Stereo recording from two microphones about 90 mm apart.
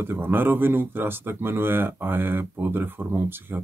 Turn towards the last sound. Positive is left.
turn(degrees=-25)  # may be behind; listen again after turning